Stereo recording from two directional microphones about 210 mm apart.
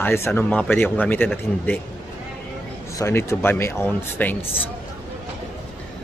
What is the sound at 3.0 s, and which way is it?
Speech, 15° left (ahead or behind).